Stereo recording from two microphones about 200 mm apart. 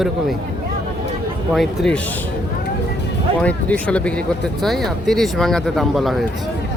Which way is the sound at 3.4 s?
5° left (ahead or behind).